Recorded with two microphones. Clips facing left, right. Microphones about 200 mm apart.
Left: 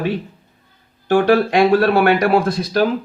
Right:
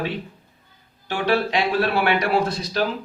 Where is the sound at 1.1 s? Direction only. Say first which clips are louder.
Left 8 dB; 50° left (ahead or behind).